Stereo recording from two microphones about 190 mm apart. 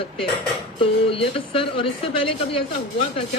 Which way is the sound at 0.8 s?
30° left (ahead or behind).